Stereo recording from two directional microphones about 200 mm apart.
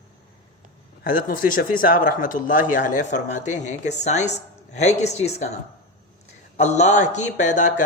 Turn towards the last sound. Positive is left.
turn(degrees=40)  # may be behind; listen again after turning